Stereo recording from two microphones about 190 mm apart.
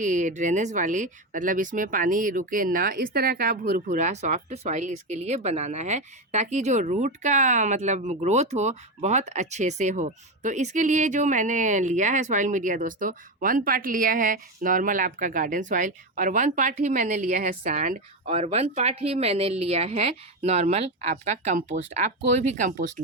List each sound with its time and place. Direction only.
0.0 s speech: 40° right (ahead or behind)